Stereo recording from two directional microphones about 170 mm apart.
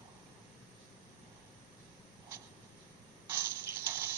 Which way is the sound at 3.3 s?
15° right (ahead or behind).